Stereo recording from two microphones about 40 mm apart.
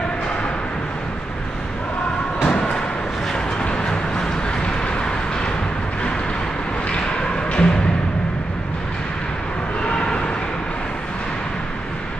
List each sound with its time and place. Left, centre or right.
2.5 s thump: left
3.6 s vehicle: left
7.0 s music: left
9.8 s a sound: left